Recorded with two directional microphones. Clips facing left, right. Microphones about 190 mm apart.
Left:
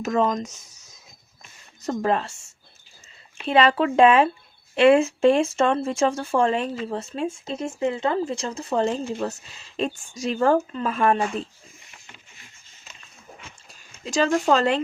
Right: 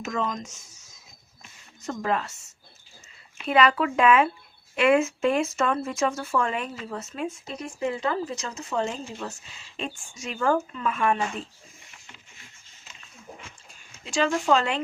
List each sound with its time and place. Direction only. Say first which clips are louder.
0.0 s speech: left 7 dB; 40° left (ahead or behind)
1.8 s speech: left 4 dB; 35° left (ahead or behind)
14.0 s speech: left 4 dB; 40° left (ahead or behind)